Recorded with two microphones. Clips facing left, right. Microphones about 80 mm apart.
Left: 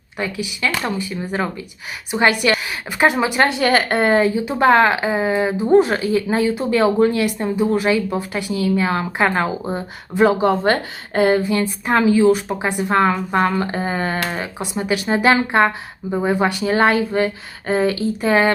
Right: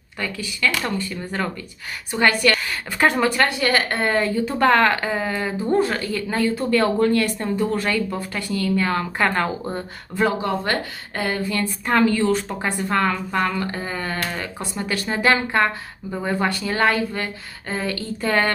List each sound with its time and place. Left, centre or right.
0.2 s speech: centre
4.1 s speech: centre
14.3 s speech: centre
17.9 s speech: centre